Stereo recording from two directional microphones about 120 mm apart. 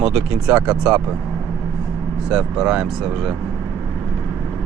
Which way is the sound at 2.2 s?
5° right (ahead or behind).